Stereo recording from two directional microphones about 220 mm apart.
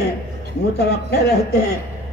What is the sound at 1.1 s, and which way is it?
Speech, 45° left (ahead or behind).